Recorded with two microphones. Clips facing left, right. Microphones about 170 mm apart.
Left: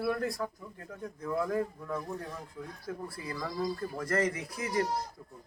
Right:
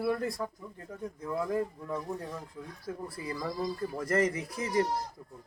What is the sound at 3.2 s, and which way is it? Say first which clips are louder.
Speech: right 1 dB; 20° right (ahead or behind).